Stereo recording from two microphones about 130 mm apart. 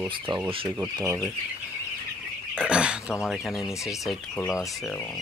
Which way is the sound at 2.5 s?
10° right (ahead or behind).